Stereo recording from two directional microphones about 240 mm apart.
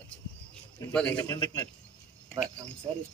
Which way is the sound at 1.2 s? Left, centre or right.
Centre.